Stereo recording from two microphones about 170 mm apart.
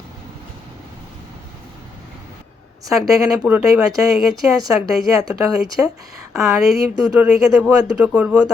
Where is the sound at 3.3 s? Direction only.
10° right (ahead or behind).